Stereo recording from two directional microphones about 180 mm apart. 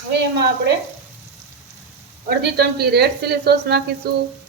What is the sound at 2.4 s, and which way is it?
Speech, 65° right (ahead or behind).